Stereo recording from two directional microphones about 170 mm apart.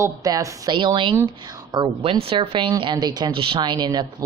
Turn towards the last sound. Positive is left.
turn(degrees=-25)  # may be behind; listen again after turning